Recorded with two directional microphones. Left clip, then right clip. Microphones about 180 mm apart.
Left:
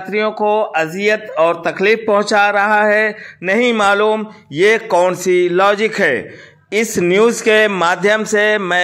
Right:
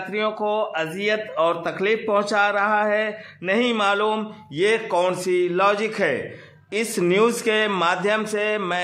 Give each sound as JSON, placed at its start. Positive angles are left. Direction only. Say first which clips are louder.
{"t": 0.1, "sound": "a man's voice", "louder": "left 9 dB", "side_deg": 25}